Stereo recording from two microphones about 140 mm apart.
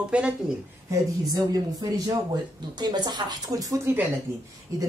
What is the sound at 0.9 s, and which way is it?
Speech, 25° right (ahead or behind).